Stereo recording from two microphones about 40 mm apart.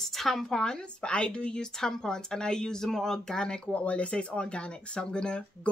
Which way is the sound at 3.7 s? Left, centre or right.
Left.